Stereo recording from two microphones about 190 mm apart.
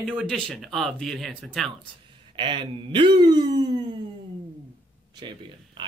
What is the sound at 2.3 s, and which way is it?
Speech, 25° right (ahead or behind).